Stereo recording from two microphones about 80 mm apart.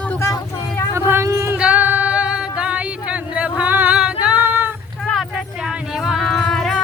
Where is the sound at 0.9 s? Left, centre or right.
Right.